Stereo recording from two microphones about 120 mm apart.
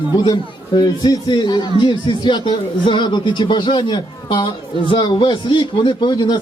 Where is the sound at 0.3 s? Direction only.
35° left (ahead or behind).